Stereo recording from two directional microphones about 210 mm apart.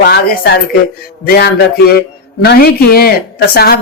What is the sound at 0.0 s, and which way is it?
Speech, 50° left (ahead or behind).